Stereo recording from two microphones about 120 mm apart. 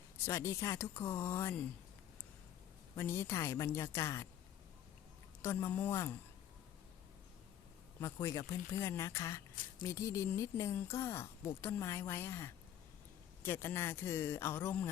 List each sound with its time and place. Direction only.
0.3 s speech: 20° left (ahead or behind)
2.9 s speech: 25° left (ahead or behind)
5.4 s speech: 20° left (ahead or behind)
8.0 s speech: 25° left (ahead or behind)